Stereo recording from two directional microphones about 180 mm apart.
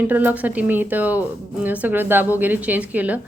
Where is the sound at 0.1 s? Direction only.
10° right (ahead or behind).